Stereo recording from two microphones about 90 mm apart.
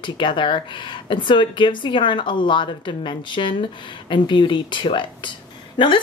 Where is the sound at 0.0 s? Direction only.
65° left (ahead or behind).